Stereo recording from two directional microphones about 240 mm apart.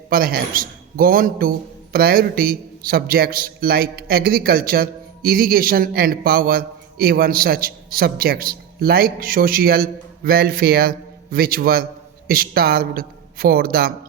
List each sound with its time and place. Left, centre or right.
0.1 s a man's voice: right